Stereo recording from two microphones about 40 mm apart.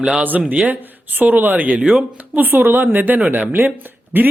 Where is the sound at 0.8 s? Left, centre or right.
Right.